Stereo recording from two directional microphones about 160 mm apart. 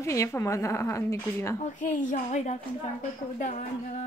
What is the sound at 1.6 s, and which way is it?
A woman's voice, 55° left (ahead or behind).